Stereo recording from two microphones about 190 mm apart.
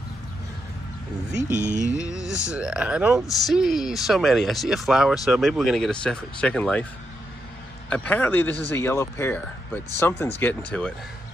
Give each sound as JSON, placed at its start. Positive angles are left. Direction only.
{"t": 1.6, "sound": "speech", "side_deg": 15}
{"t": 2.0, "sound": "music", "side_deg": -5}
{"t": 2.4, "sound": "speech", "side_deg": -5}
{"t": 7.9, "sound": "speech", "side_deg": 10}